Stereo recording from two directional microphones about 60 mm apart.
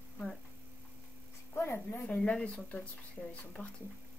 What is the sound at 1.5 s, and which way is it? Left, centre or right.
Speech, left.